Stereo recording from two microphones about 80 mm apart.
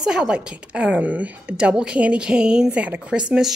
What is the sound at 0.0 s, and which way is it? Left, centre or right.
A woman's voice, centre.